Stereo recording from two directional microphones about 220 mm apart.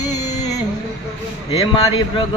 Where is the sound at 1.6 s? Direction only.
15° left (ahead or behind).